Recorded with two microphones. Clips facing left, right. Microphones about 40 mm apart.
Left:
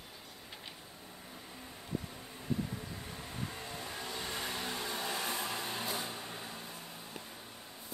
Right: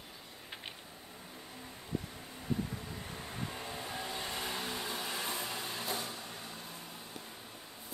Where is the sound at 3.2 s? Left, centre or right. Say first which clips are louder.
Right 1 dB; centre.